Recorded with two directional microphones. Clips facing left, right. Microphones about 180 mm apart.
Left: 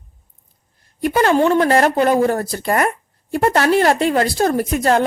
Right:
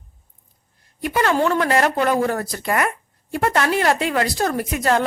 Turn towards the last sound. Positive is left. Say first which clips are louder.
# left 4 dB
turn(degrees=35)  # may be behind; listen again after turning